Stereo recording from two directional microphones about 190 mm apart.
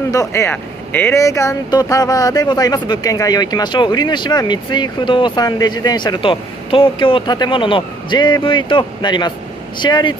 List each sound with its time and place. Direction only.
0.1 s speech: 15° left (ahead or behind)